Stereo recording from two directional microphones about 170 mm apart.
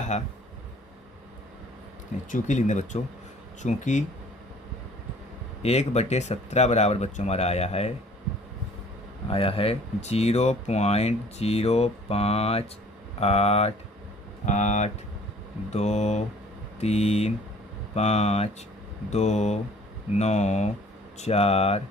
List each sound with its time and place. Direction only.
2.3 s speech: 45° left (ahead or behind)
5.6 s speech: 40° left (ahead or behind)
9.3 s speech: 35° left (ahead or behind)